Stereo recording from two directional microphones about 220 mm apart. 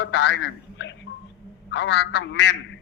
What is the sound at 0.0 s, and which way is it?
A man's voice, 55° left (ahead or behind).